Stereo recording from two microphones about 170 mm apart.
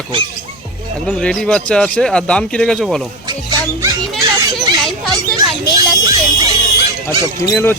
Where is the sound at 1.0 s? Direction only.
5° left (ahead or behind).